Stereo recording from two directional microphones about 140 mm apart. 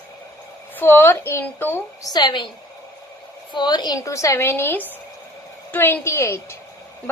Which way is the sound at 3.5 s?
30° left (ahead or behind).